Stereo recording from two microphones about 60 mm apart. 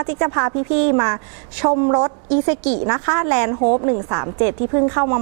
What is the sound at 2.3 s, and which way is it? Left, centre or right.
A woman's voice, centre.